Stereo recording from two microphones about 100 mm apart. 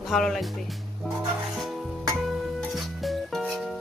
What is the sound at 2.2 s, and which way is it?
Music, centre (ahead or behind).